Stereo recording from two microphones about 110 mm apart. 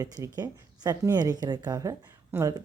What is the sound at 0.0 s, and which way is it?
Speech, 35° right (ahead or behind).